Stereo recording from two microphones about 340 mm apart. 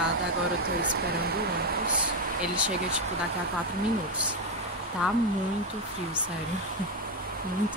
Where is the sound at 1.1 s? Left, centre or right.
Right.